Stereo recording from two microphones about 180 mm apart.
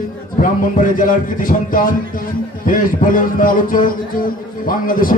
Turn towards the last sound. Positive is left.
turn(degrees=50)  # may be behind; listen again after turning